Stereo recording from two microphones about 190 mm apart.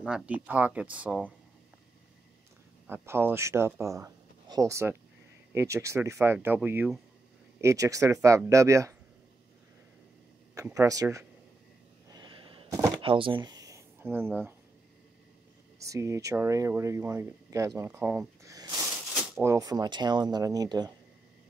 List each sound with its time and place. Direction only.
0.0 s speech: 5° right (ahead or behind)
2.9 s speech: 10° right (ahead or behind)
10.7 s speech: 20° right (ahead or behind)
12.1 s a sound: 25° right (ahead or behind)
13.0 s speech: 25° right (ahead or behind); by 14.5 s 10° right (ahead or behind)
15.8 s speech: 15° right (ahead or behind)
17.7 s a sound: 10° right (ahead or behind)
19.4 s speech: 15° right (ahead or behind)